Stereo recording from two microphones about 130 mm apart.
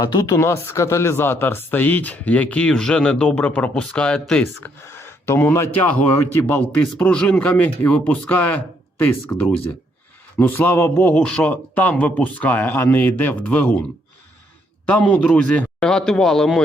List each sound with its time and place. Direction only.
0.0 s speech: 30° left (ahead or behind); by 4.7 s 10° left (ahead or behind)
4.9 s speech: 20° left (ahead or behind)
14.8 s speech: 10° left (ahead or behind)